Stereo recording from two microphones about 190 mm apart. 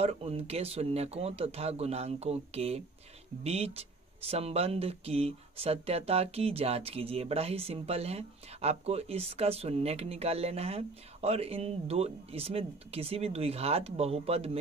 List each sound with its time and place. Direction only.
0.0 s speech: 30° right (ahead or behind)